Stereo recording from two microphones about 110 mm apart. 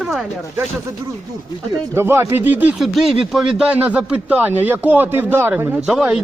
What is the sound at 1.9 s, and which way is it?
Speech, 20° right (ahead or behind).